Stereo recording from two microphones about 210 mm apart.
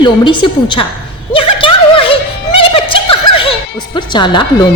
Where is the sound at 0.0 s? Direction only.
20° left (ahead or behind).